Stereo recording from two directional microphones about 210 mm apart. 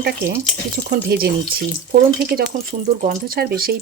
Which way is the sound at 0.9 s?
50° right (ahead or behind).